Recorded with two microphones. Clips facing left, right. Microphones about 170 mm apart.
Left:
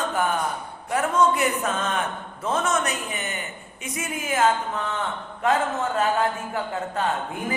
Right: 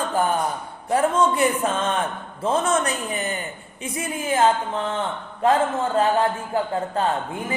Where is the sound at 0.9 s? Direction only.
30° right (ahead or behind).